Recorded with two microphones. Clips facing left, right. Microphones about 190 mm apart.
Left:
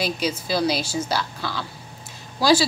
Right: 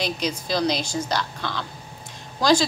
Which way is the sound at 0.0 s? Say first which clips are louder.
Left 1 dB; 5° left (ahead or behind).